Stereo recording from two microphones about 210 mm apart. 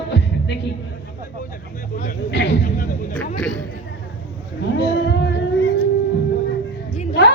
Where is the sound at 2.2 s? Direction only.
55° left (ahead or behind).